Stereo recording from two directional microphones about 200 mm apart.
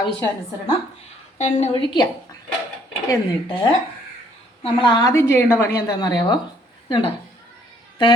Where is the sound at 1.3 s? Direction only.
35° left (ahead or behind).